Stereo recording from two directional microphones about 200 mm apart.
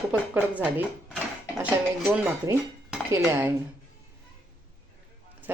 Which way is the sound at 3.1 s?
10° right (ahead or behind).